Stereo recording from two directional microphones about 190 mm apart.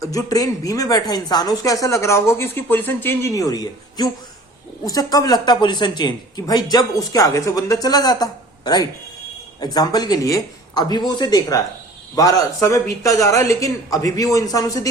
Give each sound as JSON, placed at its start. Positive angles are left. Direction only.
{"t": 0.0, "sound": "a man's voice", "side_deg": 15}